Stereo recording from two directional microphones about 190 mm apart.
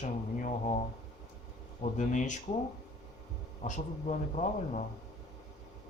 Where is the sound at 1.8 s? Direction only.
40° left (ahead or behind).